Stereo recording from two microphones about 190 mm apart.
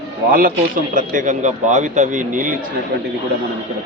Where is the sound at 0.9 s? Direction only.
45° right (ahead or behind).